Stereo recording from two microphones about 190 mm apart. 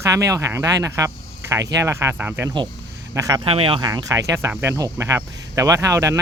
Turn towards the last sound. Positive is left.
turn(degrees=-15)  # may be behind; listen again after turning